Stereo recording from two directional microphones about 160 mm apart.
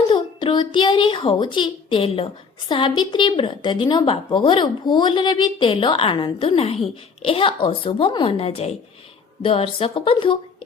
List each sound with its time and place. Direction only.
0.1 s a woman's voice: 30° left (ahead or behind)